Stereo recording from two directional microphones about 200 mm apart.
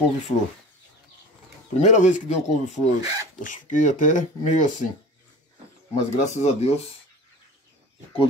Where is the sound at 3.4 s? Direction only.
40° left (ahead or behind).